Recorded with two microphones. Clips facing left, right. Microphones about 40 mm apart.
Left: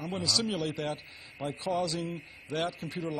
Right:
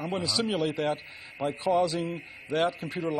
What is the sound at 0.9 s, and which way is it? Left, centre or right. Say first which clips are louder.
Speech: right 6 dB; right.